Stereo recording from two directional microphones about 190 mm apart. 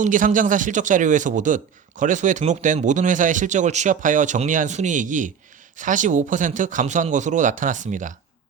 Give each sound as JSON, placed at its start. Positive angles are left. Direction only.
{"t": 0.0, "sound": "a man's voice", "side_deg": -40}